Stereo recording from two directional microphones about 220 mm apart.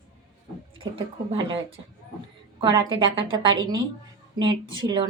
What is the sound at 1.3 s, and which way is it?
A woman's voice, 25° right (ahead or behind).